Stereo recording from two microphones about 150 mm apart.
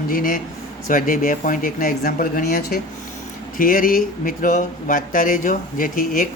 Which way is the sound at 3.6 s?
70° left (ahead or behind).